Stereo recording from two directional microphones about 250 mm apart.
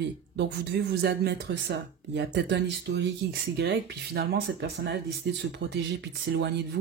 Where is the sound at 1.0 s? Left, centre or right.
Right.